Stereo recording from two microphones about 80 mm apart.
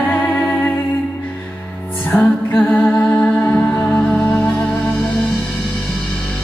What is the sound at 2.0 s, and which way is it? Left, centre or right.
Music, left.